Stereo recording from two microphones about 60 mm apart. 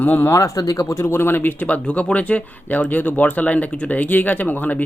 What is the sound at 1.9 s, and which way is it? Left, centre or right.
Speech, left.